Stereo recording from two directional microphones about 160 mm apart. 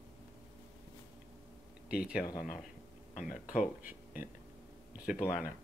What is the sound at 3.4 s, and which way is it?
Speech, 55° left (ahead or behind).